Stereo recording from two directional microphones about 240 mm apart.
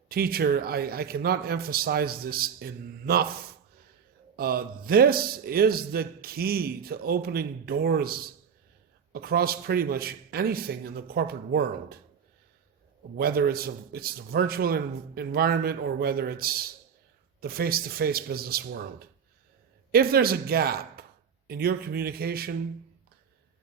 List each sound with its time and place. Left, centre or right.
0.1 s a man's voice: right
4.4 s a man's voice: right
13.1 s a man's voice: right